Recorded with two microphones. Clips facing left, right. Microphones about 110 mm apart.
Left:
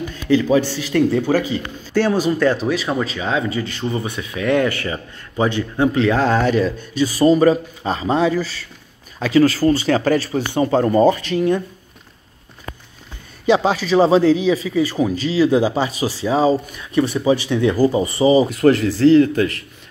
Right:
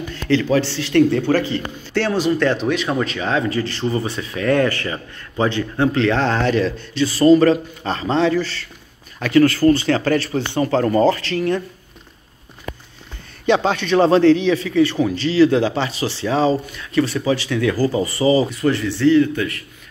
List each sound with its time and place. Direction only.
0.1 s speech: 15° left (ahead or behind)
13.5 s speech: 5° left (ahead or behind)
18.5 s speech: 40° left (ahead or behind)